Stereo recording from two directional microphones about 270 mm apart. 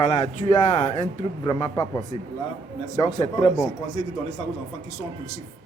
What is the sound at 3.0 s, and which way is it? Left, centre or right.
Speech, left.